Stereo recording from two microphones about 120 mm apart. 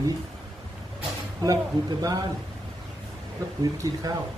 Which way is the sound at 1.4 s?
30° right (ahead or behind).